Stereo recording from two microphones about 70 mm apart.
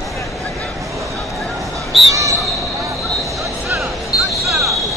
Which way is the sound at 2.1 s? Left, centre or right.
Right.